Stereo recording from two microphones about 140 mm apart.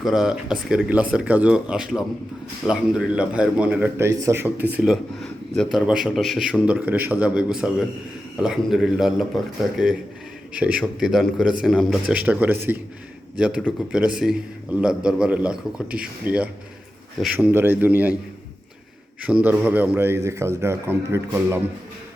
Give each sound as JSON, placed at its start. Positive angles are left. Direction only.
{"t": 0.0, "sound": "a man's voice", "side_deg": -5}
{"t": 4.6, "sound": "a man's voice", "side_deg": -5}
{"t": 19.2, "sound": "a man's voice", "side_deg": -10}